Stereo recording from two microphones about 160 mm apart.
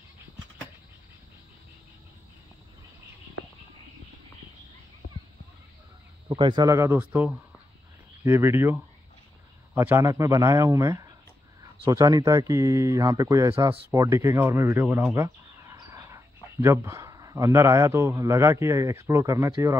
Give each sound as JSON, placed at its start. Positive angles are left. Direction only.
{"t": 6.2, "sound": "a man's voice", "side_deg": -30}
{"t": 9.8, "sound": "a man's voice", "side_deg": -15}